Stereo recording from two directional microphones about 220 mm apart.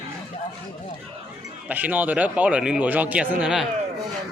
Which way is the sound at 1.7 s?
10° right (ahead or behind).